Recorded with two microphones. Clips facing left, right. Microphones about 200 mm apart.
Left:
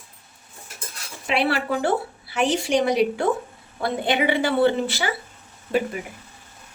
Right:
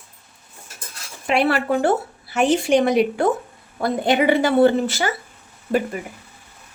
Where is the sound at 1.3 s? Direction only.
50° right (ahead or behind).